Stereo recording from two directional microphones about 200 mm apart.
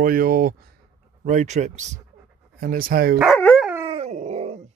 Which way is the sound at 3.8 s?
25° right (ahead or behind).